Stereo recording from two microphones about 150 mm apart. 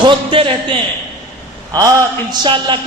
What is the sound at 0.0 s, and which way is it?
Speech, 35° right (ahead or behind).